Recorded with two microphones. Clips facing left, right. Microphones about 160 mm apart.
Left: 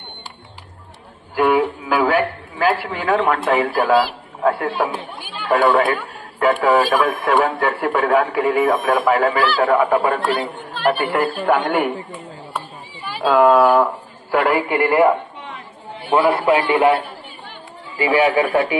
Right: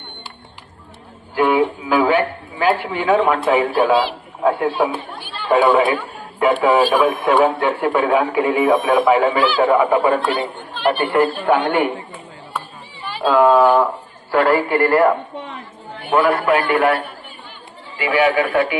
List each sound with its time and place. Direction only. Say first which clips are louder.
1.3 s music: even; centre (ahead or behind)
2.8 s a man's voice: right 3 dB; centre (ahead or behind)
5.5 s a woman's voice: right 2 dB; 10° right (ahead or behind); by 11.9 s 5° left (ahead or behind)
13.1 s a woman's voice: even; 10° left (ahead or behind); by 18.8 s 30° left (ahead or behind)